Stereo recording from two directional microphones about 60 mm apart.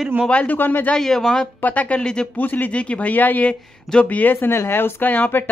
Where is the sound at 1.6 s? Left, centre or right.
Left.